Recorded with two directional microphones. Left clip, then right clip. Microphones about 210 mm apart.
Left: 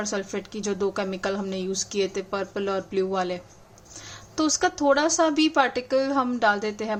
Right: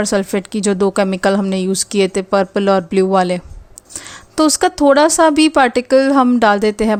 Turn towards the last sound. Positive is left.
turn(degrees=-35)  # may be behind; listen again after turning